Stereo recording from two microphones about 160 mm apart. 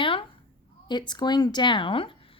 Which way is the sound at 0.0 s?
30° left (ahead or behind).